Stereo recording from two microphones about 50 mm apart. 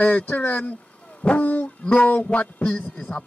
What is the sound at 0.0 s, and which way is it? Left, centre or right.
A man's voice, left.